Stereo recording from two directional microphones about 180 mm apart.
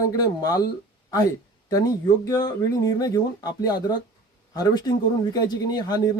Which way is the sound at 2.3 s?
20° left (ahead or behind).